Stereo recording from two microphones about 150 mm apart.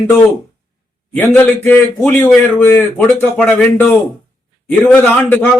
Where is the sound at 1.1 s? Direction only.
10° left (ahead or behind).